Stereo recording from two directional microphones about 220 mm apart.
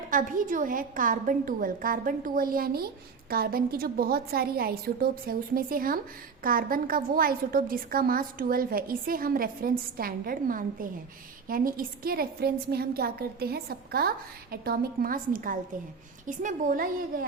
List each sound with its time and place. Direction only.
0.1 s a woman's voice: 35° right (ahead or behind)